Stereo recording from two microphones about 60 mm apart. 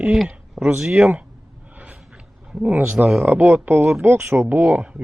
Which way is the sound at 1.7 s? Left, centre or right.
Right.